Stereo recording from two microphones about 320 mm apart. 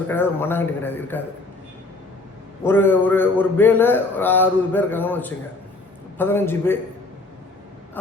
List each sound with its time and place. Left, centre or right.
0.1 s a man's voice: centre
2.6 s a man's voice: centre